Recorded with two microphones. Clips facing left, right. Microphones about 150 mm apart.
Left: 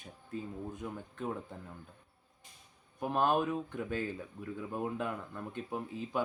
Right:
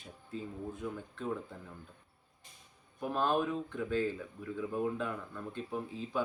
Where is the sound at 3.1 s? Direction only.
15° left (ahead or behind).